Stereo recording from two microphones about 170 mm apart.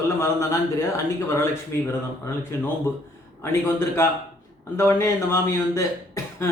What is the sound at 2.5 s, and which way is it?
Speech, 15° left (ahead or behind).